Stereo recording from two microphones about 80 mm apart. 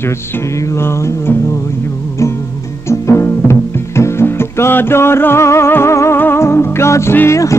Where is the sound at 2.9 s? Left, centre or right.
Left.